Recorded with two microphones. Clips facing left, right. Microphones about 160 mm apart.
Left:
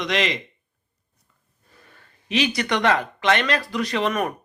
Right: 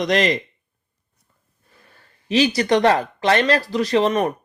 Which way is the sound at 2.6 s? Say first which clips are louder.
Right 4 dB; 35° right (ahead or behind).